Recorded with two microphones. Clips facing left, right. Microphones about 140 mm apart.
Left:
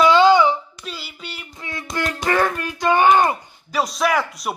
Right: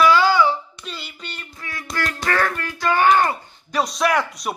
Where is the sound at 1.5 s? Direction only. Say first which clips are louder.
Left 2 dB; 20° left (ahead or behind).